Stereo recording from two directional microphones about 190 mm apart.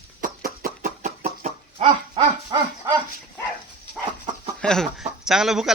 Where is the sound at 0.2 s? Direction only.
50° right (ahead or behind).